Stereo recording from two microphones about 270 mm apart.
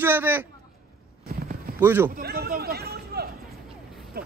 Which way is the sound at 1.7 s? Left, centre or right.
Centre.